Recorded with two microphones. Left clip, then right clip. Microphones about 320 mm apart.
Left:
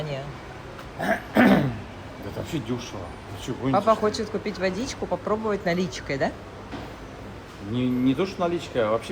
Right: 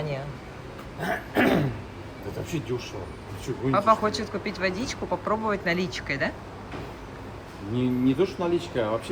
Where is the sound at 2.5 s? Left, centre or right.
Left.